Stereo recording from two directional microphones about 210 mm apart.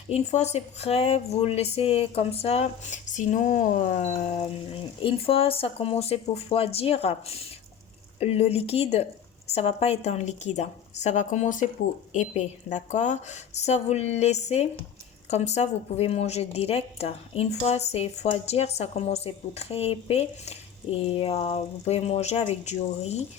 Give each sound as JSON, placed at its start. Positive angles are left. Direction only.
{"t": 0.1, "sound": "a woman's voice", "side_deg": 30}